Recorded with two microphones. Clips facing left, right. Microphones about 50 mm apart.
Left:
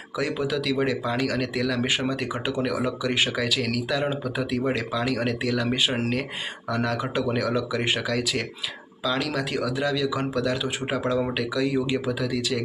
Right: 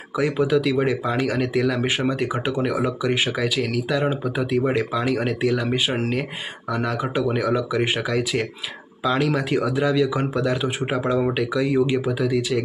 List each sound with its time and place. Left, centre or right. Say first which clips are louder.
0.2 s speech: right 6 dB; right